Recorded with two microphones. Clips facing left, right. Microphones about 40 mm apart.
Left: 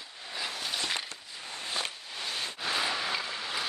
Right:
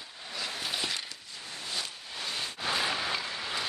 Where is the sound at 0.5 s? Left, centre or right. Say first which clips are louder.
Right 2 dB; centre.